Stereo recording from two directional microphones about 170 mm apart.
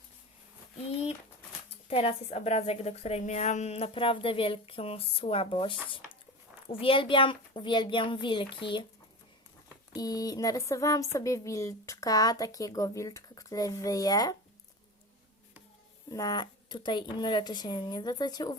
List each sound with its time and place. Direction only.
1.9 s a woman's voice: 35° left (ahead or behind)
9.9 s a woman's voice: 20° left (ahead or behind)
16.0 s a woman's voice: 20° left (ahead or behind)